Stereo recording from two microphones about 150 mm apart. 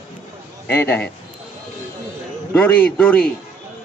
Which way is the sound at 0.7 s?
15° left (ahead or behind).